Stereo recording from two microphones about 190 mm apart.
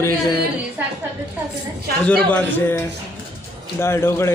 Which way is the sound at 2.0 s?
10° left (ahead or behind).